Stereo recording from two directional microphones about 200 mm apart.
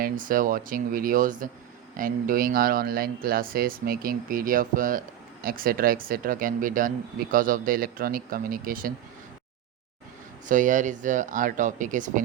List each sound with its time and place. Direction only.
0.0 s speech: 45° right (ahead or behind)
10.4 s speech: 40° right (ahead or behind)